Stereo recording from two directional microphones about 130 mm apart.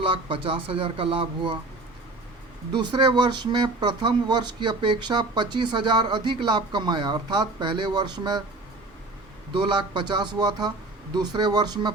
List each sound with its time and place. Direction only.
0.0 s speech: 40° right (ahead or behind)
2.7 s speech: 35° right (ahead or behind)
9.5 s speech: 35° right (ahead or behind)